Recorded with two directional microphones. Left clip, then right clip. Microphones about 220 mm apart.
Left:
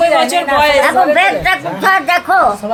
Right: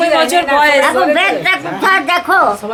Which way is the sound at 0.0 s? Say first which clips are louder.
Even; 10° right (ahead or behind).